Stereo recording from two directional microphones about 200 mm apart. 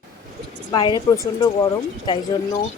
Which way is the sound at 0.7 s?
20° left (ahead or behind).